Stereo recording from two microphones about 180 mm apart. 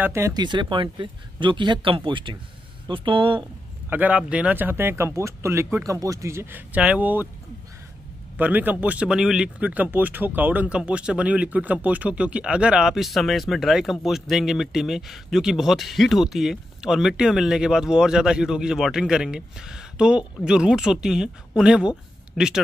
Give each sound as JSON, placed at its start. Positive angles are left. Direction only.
{"t": 0.0, "sound": "speech", "side_deg": -15}
{"t": 3.9, "sound": "speech", "side_deg": -10}
{"t": 8.4, "sound": "speech", "side_deg": -10}